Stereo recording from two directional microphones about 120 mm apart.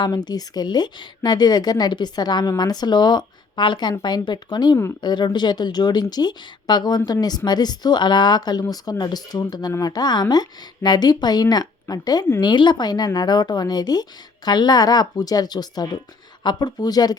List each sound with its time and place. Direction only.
0.0 s a woman's voice: 35° left (ahead or behind)